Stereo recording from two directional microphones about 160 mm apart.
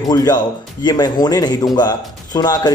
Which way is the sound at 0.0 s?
25° left (ahead or behind).